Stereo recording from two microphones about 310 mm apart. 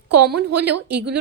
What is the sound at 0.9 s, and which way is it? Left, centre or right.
Speech, right.